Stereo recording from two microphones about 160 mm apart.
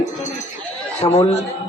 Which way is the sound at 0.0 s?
50° left (ahead or behind).